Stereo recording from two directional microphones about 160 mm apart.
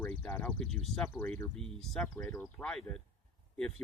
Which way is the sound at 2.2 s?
15° left (ahead or behind).